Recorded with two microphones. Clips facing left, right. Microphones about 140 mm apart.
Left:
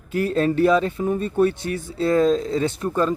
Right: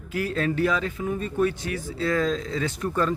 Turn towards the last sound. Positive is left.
turn(degrees=25)  # may be behind; listen again after turning